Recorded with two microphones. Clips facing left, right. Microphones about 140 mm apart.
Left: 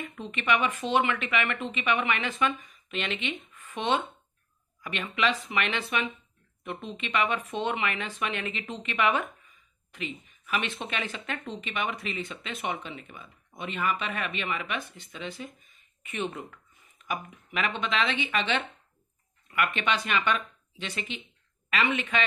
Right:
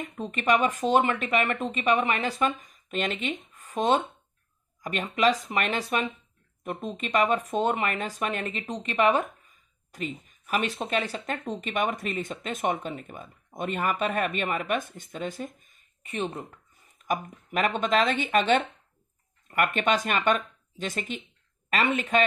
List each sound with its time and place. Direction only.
0.0 s speech: 40° right (ahead or behind)
16.1 s speech: 35° right (ahead or behind)